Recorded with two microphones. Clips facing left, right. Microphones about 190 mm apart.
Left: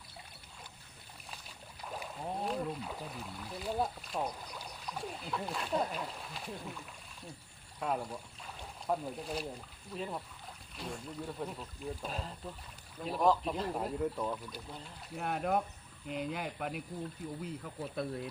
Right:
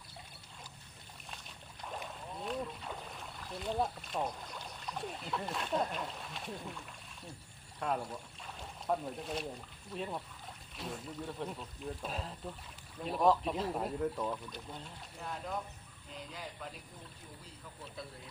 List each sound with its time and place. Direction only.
1.3 s rowboat: centre (ahead or behind)
2.7 s speech: centre (ahead or behind)
15.1 s speech: 65° left (ahead or behind)